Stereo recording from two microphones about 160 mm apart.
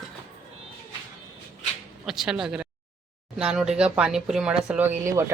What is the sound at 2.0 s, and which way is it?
Speech, 5° right (ahead or behind).